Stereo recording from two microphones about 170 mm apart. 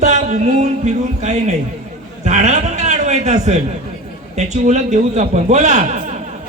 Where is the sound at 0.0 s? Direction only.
40° right (ahead or behind).